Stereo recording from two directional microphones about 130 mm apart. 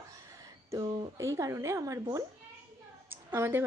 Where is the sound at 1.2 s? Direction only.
25° right (ahead or behind).